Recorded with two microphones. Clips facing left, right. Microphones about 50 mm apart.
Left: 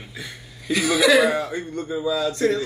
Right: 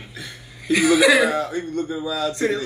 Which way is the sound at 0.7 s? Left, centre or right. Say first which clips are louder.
Right 2 dB; right.